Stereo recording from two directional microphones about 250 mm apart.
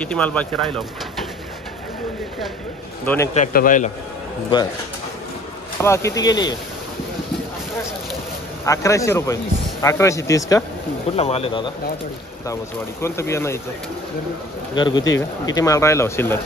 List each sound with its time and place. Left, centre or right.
0.0 s speech: centre
3.3 s speech: left
5.8 s speech: centre
8.6 s speech: centre
11.1 s speech: left
13.0 s speech: centre
14.8 s speech: centre